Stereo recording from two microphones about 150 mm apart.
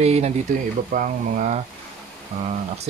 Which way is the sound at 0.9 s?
55° right (ahead or behind).